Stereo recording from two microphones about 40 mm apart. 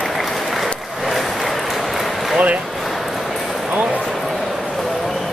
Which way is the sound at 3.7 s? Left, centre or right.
Right.